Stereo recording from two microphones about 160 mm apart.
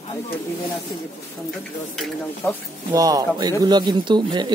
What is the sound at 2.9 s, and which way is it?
Speech, 20° right (ahead or behind).